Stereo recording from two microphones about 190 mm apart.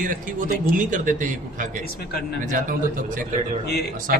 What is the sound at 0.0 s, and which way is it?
A man's voice, 45° right (ahead or behind).